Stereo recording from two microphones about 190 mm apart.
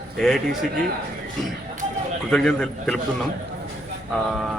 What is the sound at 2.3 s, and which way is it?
Speech, 5° left (ahead or behind).